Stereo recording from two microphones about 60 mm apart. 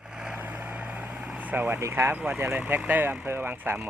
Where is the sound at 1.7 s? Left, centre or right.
Right.